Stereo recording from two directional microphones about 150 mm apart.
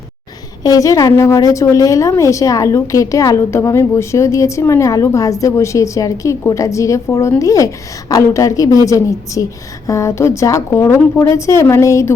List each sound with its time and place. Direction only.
0.6 s a woman's voice: 25° left (ahead or behind)